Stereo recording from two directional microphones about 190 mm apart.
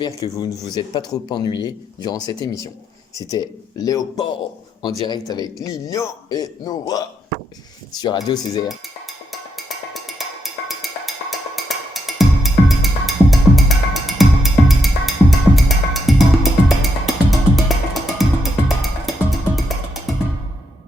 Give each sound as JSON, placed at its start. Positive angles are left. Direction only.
{"t": 0.0, "sound": "speech", "side_deg": 20}
{"t": 9.0, "sound": "percussion", "side_deg": 0}
{"t": 18.8, "sound": "music", "side_deg": 0}